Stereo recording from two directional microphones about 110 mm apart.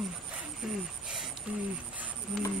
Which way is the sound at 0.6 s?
5° right (ahead or behind).